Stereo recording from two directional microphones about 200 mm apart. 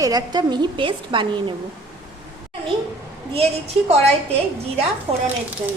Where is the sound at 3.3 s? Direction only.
30° right (ahead or behind).